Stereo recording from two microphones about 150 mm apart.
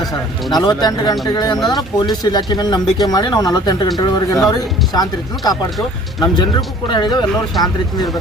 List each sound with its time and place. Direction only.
0.1 s speech: 25° left (ahead or behind)